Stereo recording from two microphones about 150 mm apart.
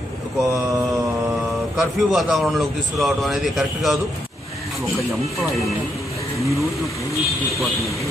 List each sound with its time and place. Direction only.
0.4 s mantra: 20° right (ahead or behind)
1.8 s a man's voice: centre (ahead or behind)